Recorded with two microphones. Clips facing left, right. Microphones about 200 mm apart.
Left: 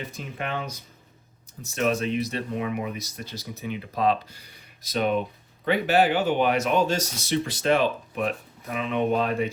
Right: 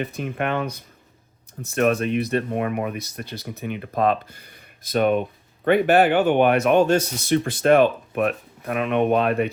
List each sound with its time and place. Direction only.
0.0 s speech: 60° right (ahead or behind)